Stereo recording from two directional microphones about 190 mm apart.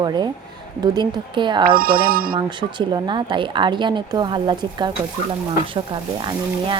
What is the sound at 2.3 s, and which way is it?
A woman's voice, 25° right (ahead or behind).